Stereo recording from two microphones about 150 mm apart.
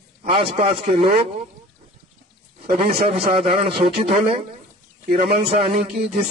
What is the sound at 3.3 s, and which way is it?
A man's voice, 40° right (ahead or behind).